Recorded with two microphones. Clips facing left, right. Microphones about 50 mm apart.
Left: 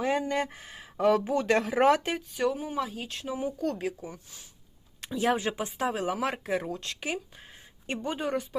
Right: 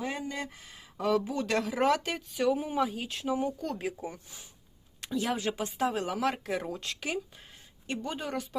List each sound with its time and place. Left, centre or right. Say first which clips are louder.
0.0 s speech: left 7 dB; left
0.4 s speech: left 4 dB; left
2.1 s speech: right 1 dB; centre
5.2 s speech: left 7 dB; left
5.5 s speech: even; centre